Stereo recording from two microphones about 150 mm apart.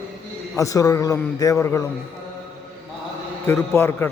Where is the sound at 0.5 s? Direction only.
20° left (ahead or behind).